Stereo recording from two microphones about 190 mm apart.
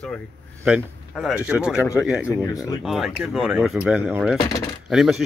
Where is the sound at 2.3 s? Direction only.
15° left (ahead or behind).